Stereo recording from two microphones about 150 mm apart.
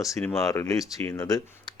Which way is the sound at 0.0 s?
20° left (ahead or behind).